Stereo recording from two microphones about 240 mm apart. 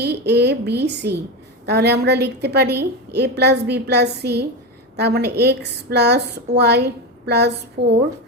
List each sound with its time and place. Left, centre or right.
0.0 s a woman's voice: right